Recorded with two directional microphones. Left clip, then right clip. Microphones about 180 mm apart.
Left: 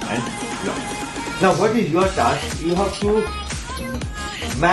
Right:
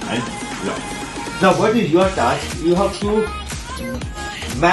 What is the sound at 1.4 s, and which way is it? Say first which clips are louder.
Speech: right 2 dB; centre (ahead or behind).